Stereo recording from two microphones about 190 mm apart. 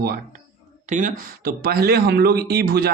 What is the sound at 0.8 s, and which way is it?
Speech, 40° right (ahead or behind).